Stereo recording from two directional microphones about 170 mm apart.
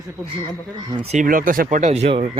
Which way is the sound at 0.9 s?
35° right (ahead or behind).